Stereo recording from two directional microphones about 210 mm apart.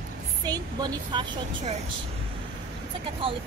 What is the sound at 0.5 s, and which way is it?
Speech, 20° right (ahead or behind).